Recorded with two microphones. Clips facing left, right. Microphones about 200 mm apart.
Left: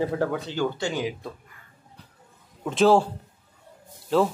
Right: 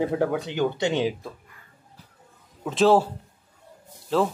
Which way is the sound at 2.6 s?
Centre (ahead or behind).